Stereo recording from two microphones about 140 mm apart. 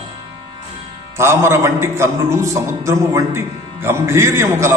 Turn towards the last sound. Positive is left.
turn(degrees=-20)  # may be behind; listen again after turning